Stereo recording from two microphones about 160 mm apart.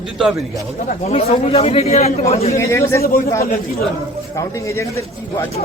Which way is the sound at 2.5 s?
20° left (ahead or behind).